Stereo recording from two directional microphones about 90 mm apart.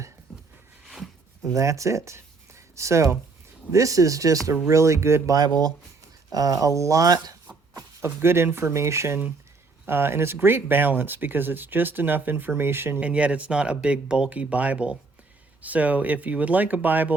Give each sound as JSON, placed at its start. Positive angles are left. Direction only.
{"t": 0.3, "sound": "a sound", "side_deg": 0}
{"t": 1.5, "sound": "speech", "side_deg": -35}
{"t": 8.0, "sound": "speech", "side_deg": -30}
{"t": 13.1, "sound": "speech", "side_deg": -15}